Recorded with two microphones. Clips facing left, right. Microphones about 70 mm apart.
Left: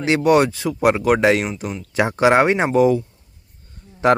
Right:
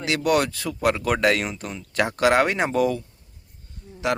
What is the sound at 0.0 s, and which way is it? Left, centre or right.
Speech, left.